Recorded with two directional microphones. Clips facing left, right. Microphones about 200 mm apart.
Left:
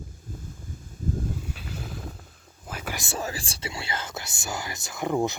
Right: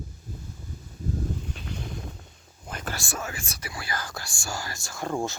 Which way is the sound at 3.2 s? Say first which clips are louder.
Left 3 dB; 35° left (ahead or behind).